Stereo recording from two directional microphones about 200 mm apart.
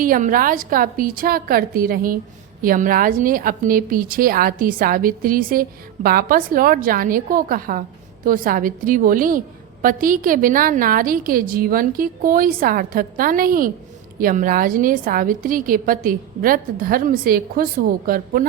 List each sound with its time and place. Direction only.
0.0 s a woman's voice: 45° right (ahead or behind)